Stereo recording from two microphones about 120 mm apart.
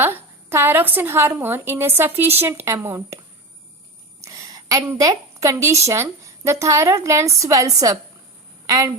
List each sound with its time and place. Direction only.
0.0 s a woman's voice: 20° right (ahead or behind)
4.2 s a sound: 30° right (ahead or behind)
5.8 s a woman's voice: 25° right (ahead or behind)